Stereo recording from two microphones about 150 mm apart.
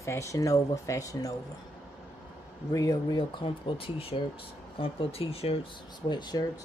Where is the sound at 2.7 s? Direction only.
25° left (ahead or behind).